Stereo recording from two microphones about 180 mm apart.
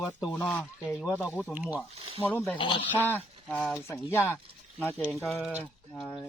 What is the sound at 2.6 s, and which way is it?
Speech, 30° left (ahead or behind).